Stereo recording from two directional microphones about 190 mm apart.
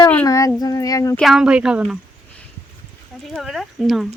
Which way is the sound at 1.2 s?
Centre (ahead or behind).